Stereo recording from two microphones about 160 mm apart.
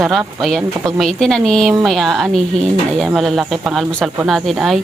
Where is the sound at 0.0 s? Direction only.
Centre (ahead or behind).